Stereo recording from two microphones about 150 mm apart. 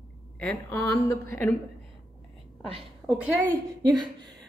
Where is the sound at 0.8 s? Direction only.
20° left (ahead or behind).